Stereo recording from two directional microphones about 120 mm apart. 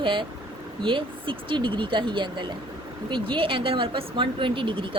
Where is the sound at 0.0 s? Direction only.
45° right (ahead or behind).